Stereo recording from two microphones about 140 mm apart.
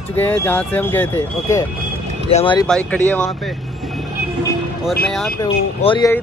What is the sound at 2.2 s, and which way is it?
Speech, 40° left (ahead or behind).